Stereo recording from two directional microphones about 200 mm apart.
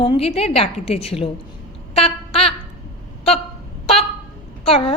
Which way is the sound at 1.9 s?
30° left (ahead or behind).